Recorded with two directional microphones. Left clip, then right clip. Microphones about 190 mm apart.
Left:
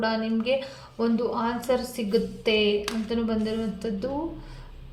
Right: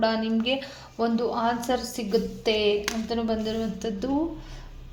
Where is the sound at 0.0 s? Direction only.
35° right (ahead or behind).